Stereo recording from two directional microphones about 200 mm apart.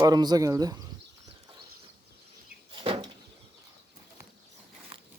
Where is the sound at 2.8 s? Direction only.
25° right (ahead or behind).